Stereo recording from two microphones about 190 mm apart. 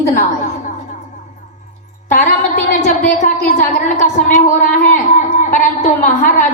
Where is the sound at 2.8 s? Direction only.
40° left (ahead or behind).